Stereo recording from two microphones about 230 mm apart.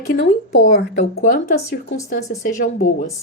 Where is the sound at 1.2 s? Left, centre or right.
Left.